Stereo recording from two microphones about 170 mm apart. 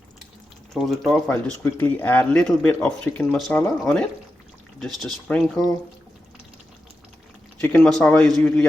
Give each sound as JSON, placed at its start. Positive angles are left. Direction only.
{"t": 0.7, "sound": "speech", "side_deg": 0}
{"t": 7.6, "sound": "speech", "side_deg": 5}